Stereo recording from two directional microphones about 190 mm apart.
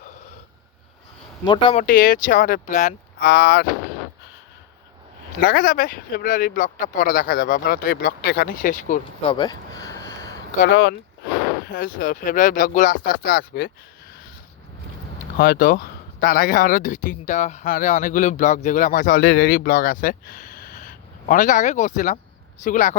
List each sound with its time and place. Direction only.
1.7 s speech: 45° left (ahead or behind)
5.5 s speech: 50° left (ahead or behind)
9.2 s a sound: 25° left (ahead or behind)
10.6 s speech: 60° left (ahead or behind)
11.6 s speech: 50° left (ahead or behind)
15.4 s speech: 50° left (ahead or behind)